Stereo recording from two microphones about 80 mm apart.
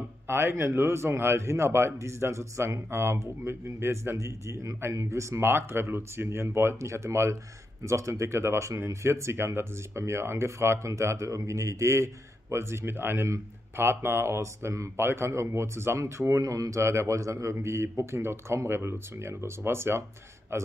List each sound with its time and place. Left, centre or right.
0.3 s speech: right